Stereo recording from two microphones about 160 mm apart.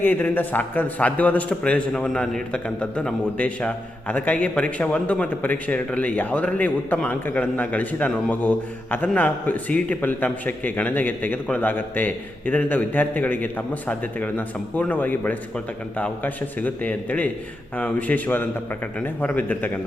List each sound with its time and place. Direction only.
0.0 s a man's voice: 10° left (ahead or behind)